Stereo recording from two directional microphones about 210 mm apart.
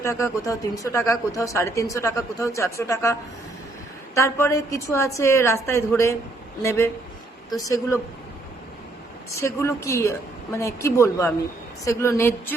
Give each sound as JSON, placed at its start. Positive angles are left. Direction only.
{"t": 0.0, "sound": "speech", "side_deg": 15}
{"t": 9.3, "sound": "speech", "side_deg": 15}